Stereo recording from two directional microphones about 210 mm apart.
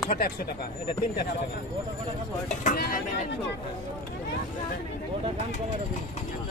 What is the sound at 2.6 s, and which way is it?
Speech, 45° left (ahead or behind).